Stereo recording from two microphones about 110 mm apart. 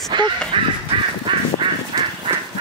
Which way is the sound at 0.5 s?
45° right (ahead or behind).